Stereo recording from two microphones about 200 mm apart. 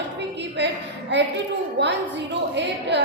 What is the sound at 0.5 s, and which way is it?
A woman's voice, 60° right (ahead or behind).